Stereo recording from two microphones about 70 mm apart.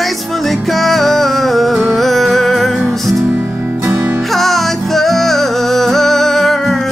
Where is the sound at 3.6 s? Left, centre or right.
Right.